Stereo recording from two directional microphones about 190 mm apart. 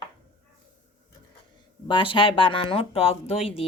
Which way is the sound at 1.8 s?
25° left (ahead or behind).